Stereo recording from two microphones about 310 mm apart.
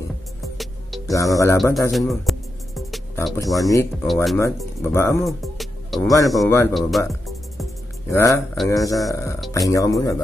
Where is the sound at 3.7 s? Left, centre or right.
Centre.